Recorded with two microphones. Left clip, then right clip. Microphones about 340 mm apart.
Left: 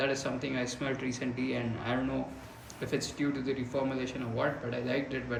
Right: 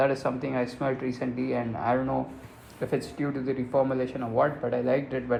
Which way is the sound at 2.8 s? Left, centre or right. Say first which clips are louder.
Right 3 dB; centre.